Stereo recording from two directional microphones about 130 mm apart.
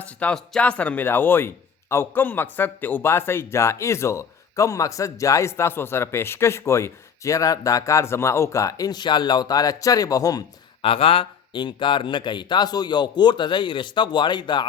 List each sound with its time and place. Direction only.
0.2 s a man's voice: 5° left (ahead or behind); by 10.4 s 25° left (ahead or behind)
10.8 s speech: 45° left (ahead or behind)